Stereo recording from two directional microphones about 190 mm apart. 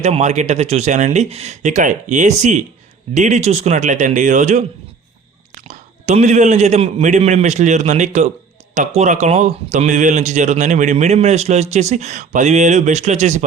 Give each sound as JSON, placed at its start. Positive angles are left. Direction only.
{"t": 0.0, "sound": "speech", "side_deg": -35}